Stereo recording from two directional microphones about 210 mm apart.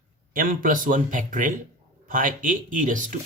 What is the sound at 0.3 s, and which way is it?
Speech, 40° right (ahead or behind).